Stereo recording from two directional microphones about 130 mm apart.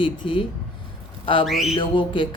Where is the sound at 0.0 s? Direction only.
40° left (ahead or behind).